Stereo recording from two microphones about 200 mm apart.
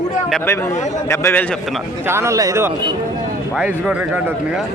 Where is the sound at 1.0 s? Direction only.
15° left (ahead or behind).